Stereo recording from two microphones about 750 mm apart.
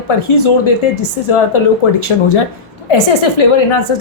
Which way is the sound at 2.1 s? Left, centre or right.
Left.